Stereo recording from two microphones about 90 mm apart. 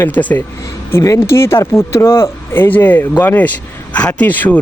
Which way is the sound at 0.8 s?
35° left (ahead or behind).